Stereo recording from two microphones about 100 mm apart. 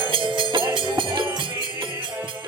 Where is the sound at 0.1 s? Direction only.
55° right (ahead or behind).